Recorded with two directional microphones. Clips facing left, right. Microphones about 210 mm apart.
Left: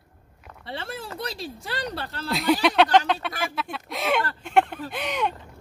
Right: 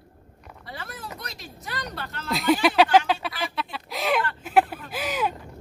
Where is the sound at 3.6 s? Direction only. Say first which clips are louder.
Even; centre (ahead or behind).